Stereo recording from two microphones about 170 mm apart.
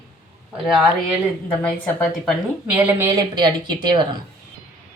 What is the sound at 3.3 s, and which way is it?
Speech, 25° right (ahead or behind).